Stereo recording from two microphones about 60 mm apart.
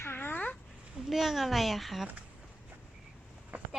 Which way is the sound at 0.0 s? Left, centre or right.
Left.